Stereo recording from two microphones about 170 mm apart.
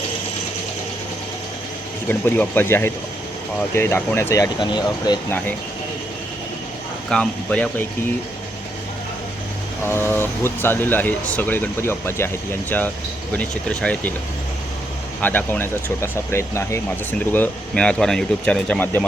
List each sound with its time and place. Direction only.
2.0 s speech: 10° left (ahead or behind)
7.1 s speech: 5° left (ahead or behind)
9.8 s speech: 10° left (ahead or behind)
15.2 s speech: 10° left (ahead or behind)